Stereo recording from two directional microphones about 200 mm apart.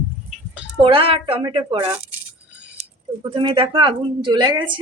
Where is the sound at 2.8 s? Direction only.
35° right (ahead or behind).